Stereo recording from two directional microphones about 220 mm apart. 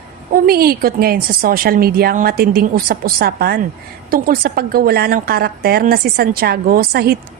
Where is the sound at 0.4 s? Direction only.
45° right (ahead or behind).